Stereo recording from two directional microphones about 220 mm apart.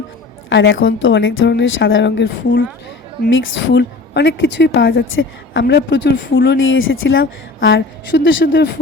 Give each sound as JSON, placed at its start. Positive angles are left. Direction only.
{"t": 0.5, "sound": "a woman's voice", "side_deg": 60}